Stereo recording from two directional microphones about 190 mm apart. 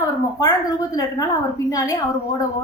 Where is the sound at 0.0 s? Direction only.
20° left (ahead or behind).